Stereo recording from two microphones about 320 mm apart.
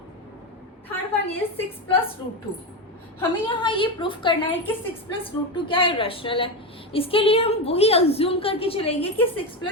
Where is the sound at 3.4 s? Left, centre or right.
Centre.